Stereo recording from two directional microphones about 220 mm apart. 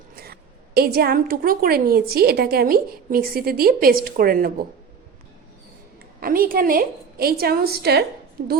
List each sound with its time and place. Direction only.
0.2 s a woman's voice: 45° right (ahead or behind)
6.1 s a woman's voice: 40° right (ahead or behind)